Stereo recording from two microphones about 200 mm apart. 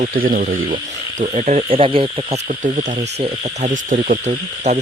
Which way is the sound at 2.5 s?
40° right (ahead or behind).